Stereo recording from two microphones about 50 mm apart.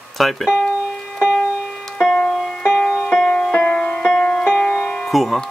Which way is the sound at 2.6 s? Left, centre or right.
Centre.